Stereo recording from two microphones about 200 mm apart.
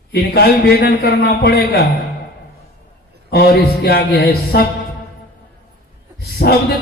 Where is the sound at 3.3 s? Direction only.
55° left (ahead or behind).